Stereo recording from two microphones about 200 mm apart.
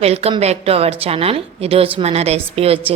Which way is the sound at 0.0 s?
30° right (ahead or behind).